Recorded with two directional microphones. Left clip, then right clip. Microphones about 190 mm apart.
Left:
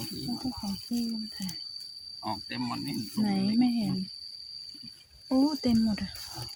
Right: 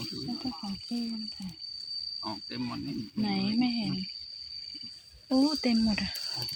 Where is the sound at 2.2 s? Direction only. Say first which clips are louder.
Left 3 dB; 50° left (ahead or behind).